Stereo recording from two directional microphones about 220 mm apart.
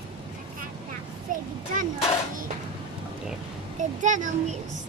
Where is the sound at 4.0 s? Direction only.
35° right (ahead or behind).